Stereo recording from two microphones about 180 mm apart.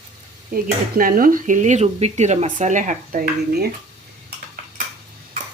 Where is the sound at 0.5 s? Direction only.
55° right (ahead or behind).